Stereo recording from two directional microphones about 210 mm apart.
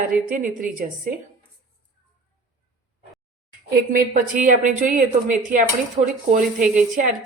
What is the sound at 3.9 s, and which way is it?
A woman's voice, 40° right (ahead or behind).